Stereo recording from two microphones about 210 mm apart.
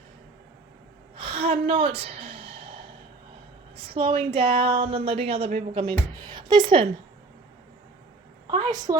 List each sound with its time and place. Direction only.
1.1 s sigh: 25° right (ahead or behind)
3.8 s speech: 25° right (ahead or behind)
8.4 s speech: 20° right (ahead or behind)